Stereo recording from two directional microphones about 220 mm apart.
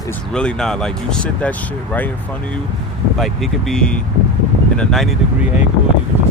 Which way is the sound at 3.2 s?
Centre (ahead or behind).